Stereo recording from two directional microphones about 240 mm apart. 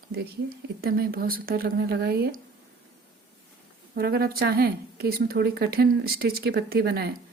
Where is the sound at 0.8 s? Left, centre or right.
Right.